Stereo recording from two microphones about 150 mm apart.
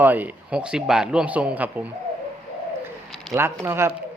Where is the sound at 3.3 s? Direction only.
15° right (ahead or behind).